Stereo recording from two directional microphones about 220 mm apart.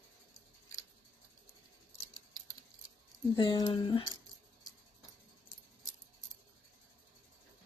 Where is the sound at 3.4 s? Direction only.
20° left (ahead or behind).